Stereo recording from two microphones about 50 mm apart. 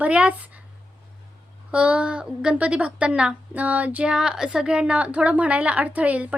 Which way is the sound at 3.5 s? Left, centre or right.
Right.